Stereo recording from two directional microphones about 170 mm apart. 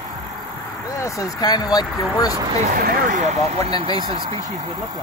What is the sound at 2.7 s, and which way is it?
Speech, 60° right (ahead or behind).